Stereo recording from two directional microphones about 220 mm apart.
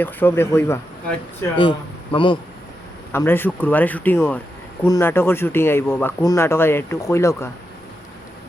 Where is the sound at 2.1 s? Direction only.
20° left (ahead or behind).